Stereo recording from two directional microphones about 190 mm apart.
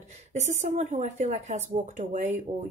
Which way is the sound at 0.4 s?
40° right (ahead or behind).